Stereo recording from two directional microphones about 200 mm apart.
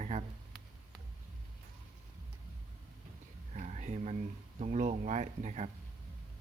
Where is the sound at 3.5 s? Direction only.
35° right (ahead or behind).